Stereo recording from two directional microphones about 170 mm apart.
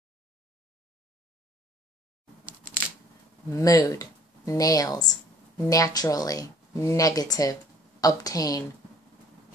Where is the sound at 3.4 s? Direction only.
20° left (ahead or behind).